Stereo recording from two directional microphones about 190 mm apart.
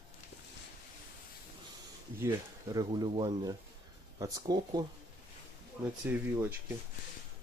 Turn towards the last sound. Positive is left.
turn(degrees=-10)  # may be behind; listen again after turning